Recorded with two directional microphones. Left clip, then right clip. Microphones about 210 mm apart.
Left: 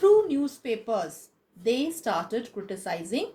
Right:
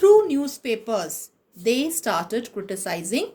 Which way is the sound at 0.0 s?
55° right (ahead or behind).